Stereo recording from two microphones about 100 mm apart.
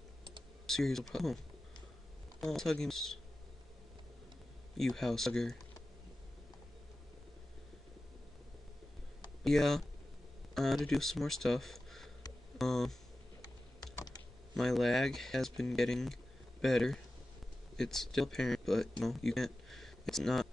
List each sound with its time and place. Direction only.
0.7 s speech: 5° left (ahead or behind)
2.4 s speech: 5° left (ahead or behind)
4.7 s speech: 5° left (ahead or behind)
9.4 s speech: 5° left (ahead or behind)
12.5 s a sound: 5° left (ahead or behind)
13.9 s typing: 40° left (ahead or behind)
14.5 s speech: 5° left (ahead or behind)